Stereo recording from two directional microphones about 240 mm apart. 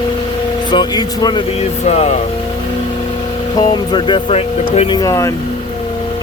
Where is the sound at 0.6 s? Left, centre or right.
Centre.